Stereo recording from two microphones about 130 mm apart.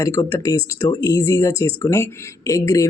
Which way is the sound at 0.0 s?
25° left (ahead or behind).